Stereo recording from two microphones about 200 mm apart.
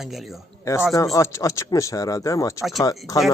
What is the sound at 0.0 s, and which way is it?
Speech, centre (ahead or behind).